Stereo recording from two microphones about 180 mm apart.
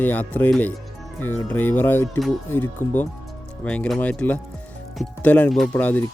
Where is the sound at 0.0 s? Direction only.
10° left (ahead or behind).